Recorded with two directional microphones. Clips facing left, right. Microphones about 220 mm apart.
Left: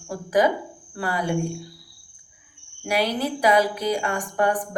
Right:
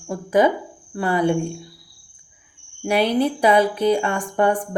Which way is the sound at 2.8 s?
25° right (ahead or behind).